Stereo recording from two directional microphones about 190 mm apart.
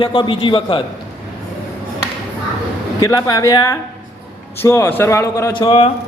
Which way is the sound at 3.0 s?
20° left (ahead or behind).